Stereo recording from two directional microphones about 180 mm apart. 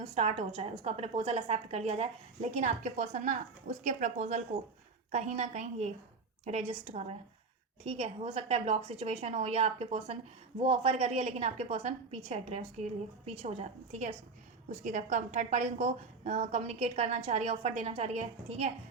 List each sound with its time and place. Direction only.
0.0 s a woman's voice: 35° right (ahead or behind)